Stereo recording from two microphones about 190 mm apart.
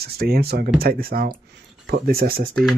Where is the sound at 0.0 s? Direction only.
55° right (ahead or behind).